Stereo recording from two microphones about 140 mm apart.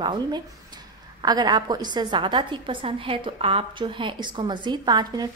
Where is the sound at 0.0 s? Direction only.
30° right (ahead or behind).